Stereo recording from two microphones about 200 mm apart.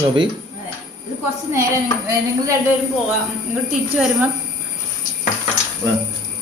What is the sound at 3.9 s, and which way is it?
Speech, 5° right (ahead or behind).